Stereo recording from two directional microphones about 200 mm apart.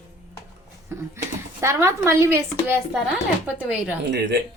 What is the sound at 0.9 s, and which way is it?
A woman's voice, 10° right (ahead or behind).